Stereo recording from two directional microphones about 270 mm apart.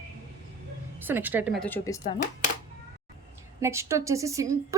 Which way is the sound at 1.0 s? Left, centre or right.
Centre.